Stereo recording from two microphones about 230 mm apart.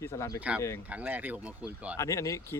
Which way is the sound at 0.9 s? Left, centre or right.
Centre.